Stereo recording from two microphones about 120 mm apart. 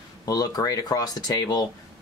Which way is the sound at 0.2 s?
30° left (ahead or behind).